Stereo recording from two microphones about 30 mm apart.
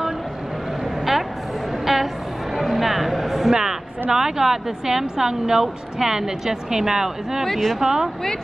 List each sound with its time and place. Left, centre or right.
1.9 s music: centre
4.1 s speech: centre
7.4 s speech: centre
7.8 s speech: right